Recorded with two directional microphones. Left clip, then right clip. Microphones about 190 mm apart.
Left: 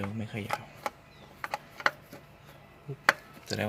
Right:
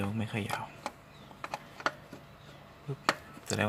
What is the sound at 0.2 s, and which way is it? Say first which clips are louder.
Speech: right 2 dB; 5° right (ahead or behind).